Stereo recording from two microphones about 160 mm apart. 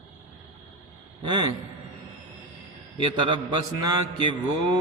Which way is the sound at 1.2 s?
25° right (ahead or behind).